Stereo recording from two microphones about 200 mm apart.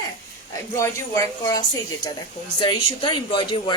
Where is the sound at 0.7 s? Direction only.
15° left (ahead or behind).